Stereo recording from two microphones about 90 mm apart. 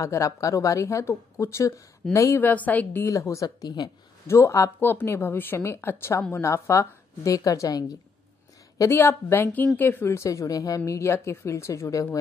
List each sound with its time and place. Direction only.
0.0 s a woman's voice: 35° left (ahead or behind)
2.4 s a woman's voice: 20° left (ahead or behind)
3.1 s speech: 35° left (ahead or behind)
4.3 s a woman's voice: 30° left (ahead or behind)
4.7 s a woman's voice: 20° left (ahead or behind); by 8.0 s 40° left (ahead or behind)
8.7 s a woman's voice: 30° left (ahead or behind)